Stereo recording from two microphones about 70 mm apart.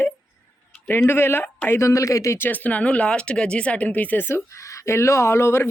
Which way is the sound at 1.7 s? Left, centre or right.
Left.